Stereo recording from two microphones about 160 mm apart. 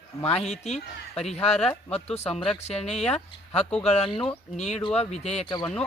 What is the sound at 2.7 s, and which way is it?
Speech, 45° left (ahead or behind).